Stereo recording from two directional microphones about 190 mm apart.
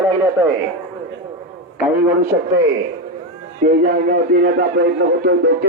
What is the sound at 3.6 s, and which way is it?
Speech, 45° right (ahead or behind).